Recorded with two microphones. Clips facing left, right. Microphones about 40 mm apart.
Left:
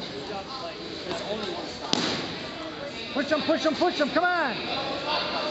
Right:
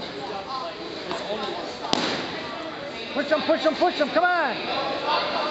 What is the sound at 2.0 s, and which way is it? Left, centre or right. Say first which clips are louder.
Fireworks: right 1 dB; centre.